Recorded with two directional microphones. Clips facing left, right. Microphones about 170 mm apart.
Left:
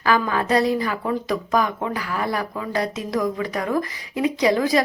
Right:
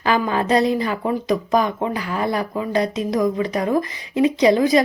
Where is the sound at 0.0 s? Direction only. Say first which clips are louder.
Right 1 dB; 25° right (ahead or behind).